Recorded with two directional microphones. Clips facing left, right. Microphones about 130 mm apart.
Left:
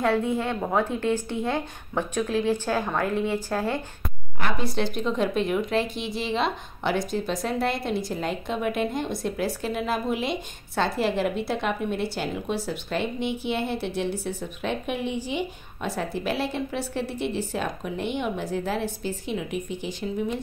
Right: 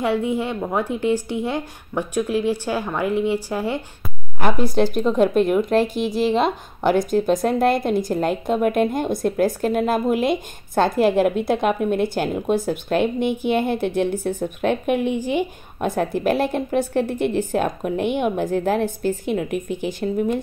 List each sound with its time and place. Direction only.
0.0 s speech: 15° right (ahead or behind)
4.4 s speech: 50° right (ahead or behind)